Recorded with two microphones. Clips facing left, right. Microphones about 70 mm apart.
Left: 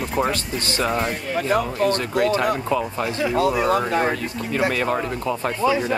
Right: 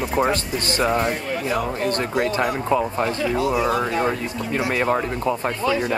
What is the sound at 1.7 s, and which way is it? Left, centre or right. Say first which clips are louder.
Speech: left 2 dB; right.